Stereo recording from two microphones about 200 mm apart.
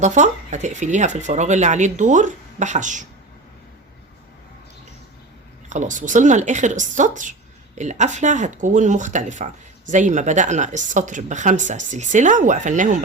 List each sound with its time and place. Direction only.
0.0 s speech: 35° right (ahead or behind)
5.6 s speech: 40° right (ahead or behind)